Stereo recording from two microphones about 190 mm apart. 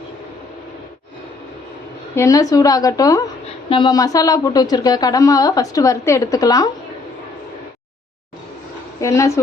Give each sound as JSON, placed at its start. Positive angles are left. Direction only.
{"t": 2.1, "sound": "a woman's voice", "side_deg": 15}
{"t": 9.0, "sound": "speech", "side_deg": 15}